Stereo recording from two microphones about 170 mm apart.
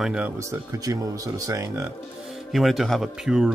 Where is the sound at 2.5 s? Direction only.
Centre (ahead or behind).